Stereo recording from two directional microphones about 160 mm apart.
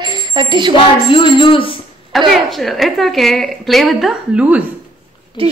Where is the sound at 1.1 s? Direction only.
30° left (ahead or behind).